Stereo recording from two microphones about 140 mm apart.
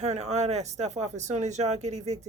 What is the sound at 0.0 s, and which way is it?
Speech, 55° right (ahead or behind).